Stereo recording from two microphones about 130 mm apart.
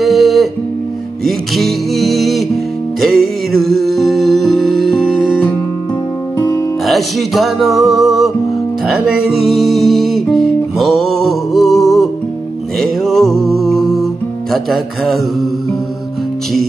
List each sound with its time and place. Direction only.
0.0 s music: centre (ahead or behind)
6.9 s a sound: centre (ahead or behind)
8.8 s music: 5° right (ahead or behind)